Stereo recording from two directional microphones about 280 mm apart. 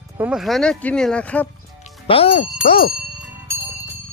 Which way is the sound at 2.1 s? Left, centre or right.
Left.